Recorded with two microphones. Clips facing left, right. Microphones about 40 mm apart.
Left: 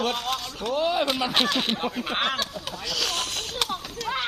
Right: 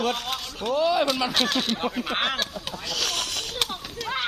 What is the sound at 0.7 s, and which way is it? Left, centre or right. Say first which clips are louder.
Speech: right 2 dB; right.